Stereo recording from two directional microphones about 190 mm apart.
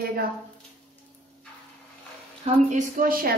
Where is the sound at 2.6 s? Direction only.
45° right (ahead or behind).